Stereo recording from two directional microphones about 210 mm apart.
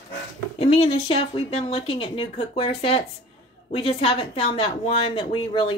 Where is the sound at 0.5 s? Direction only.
30° left (ahead or behind).